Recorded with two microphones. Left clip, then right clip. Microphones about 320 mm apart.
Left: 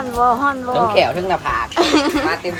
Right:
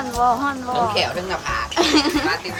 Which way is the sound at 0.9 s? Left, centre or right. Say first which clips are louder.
Left 6 dB; centre.